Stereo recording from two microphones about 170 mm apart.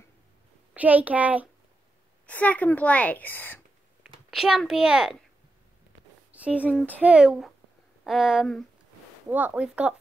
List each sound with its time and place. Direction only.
0.7 s a child's voice: 10° right (ahead or behind)
2.2 s a woman's voice: 10° left (ahead or behind)
4.0 s a child's voice: 5° right (ahead or behind)
6.3 s speech: 10° right (ahead or behind)
6.7 s a woman's voice: 10° left (ahead or behind)
7.0 s a child's voice: 5° right (ahead or behind)